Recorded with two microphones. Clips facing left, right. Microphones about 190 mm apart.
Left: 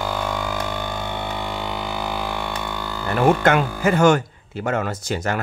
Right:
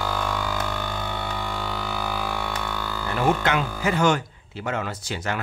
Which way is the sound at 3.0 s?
55° left (ahead or behind).